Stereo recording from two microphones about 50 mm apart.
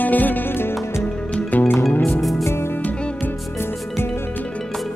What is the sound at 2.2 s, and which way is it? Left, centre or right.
Music, centre.